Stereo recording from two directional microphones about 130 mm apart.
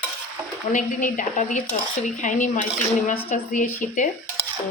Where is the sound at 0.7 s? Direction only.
80° left.